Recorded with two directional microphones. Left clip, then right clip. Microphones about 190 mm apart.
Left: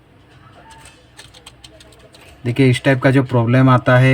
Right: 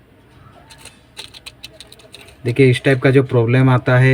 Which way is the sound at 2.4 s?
25° left (ahead or behind).